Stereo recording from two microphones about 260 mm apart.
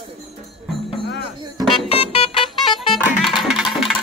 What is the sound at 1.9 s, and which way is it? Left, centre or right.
Music, left.